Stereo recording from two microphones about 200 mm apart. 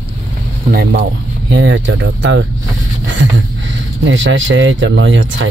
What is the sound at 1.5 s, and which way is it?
Speech, 65° right (ahead or behind).